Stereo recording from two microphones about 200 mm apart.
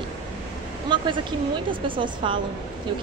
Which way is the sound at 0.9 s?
25° right (ahead or behind).